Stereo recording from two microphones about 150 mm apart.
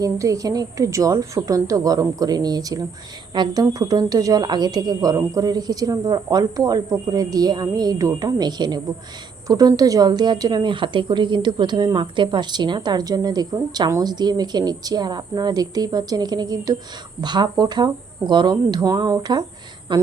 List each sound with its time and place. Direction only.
0.0 s a woman's voice: 20° right (ahead or behind)